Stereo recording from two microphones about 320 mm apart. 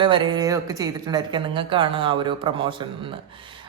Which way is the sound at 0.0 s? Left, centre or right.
Centre.